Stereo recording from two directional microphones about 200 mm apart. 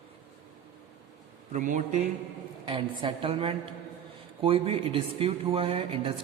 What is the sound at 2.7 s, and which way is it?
Speech, 25° right (ahead or behind).